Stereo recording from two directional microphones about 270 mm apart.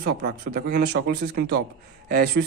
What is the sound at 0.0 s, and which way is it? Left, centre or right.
Speech, right.